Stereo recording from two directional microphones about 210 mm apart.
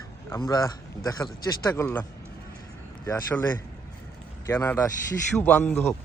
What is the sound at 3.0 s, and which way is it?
A man's voice, 10° left (ahead or behind).